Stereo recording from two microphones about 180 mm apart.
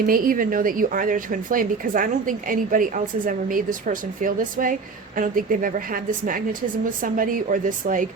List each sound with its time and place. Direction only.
0.0 s speech: 50° right (ahead or behind)